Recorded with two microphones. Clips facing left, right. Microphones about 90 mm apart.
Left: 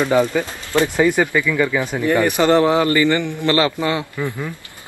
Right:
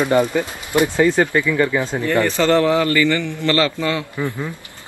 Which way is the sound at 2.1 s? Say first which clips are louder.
Left 2 dB; 15° left (ahead or behind).